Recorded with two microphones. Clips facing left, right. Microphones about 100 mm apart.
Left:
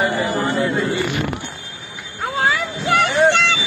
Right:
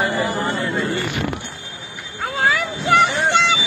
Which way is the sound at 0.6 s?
20° left (ahead or behind).